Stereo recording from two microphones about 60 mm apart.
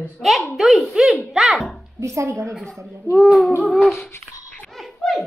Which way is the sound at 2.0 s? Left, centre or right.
Right.